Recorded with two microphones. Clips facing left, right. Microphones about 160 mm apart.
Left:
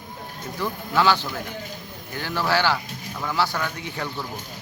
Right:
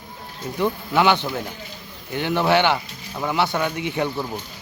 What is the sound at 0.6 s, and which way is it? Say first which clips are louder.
A man's voice: right 3 dB; 20° right (ahead or behind).